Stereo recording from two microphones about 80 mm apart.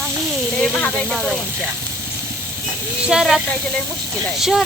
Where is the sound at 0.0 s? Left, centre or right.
Right.